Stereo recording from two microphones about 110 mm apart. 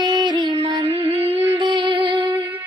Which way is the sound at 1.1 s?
20° right (ahead or behind).